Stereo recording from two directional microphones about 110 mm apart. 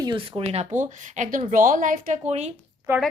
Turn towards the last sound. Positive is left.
turn(degrees=-25)  # may be behind; listen again after turning